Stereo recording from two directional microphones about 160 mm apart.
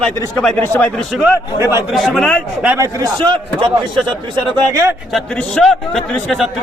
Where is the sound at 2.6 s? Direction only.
10° right (ahead or behind).